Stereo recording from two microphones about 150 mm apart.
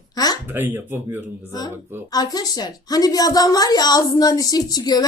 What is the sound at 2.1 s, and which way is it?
A woman's voice, 25° left (ahead or behind).